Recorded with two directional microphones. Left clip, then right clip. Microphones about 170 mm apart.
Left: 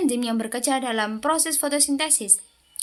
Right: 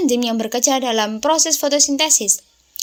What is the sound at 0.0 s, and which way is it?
Speech, 25° right (ahead or behind).